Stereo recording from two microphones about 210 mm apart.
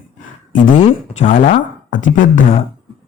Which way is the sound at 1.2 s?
40° left (ahead or behind).